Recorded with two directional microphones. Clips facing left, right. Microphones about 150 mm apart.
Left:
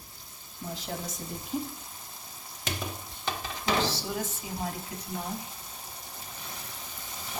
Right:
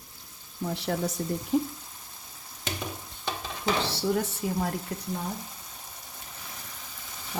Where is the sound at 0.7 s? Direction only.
70° right (ahead or behind).